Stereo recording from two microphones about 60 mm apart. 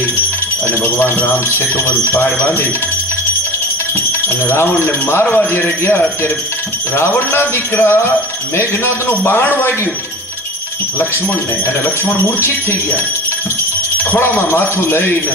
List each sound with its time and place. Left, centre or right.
0.8 s a man's voice: left
5.2 s speech: centre
7.0 s a man's voice: left
14.1 s a man's voice: left